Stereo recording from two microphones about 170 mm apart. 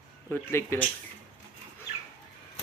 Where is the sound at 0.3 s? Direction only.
10° left (ahead or behind).